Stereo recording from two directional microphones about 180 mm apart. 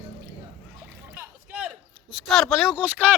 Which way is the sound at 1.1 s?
10° right (ahead or behind).